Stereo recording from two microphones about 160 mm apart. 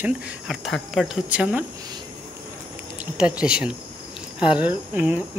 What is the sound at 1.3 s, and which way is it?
Speech, 10° right (ahead or behind).